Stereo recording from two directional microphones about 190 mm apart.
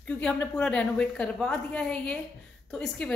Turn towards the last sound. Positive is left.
turn(degrees=5)  # may be behind; listen again after turning